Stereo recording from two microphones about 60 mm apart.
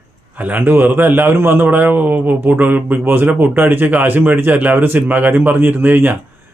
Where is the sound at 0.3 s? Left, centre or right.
Right.